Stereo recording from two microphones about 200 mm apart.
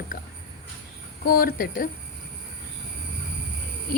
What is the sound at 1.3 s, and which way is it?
Speech, 45° left (ahead or behind).